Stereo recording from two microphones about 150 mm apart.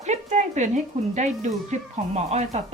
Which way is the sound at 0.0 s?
50° right (ahead or behind).